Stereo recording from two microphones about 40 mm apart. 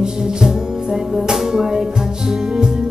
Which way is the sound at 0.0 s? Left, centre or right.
Centre.